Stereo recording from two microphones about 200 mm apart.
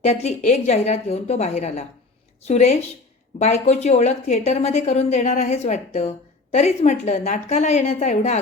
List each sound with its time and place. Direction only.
0.0 s a woman's voice: 35° left (ahead or behind)